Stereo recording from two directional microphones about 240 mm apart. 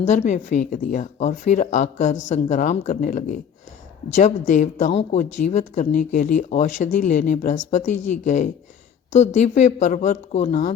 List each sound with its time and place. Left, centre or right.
0.0 s speech: left
7.9 s speech: left
8.2 s speech: left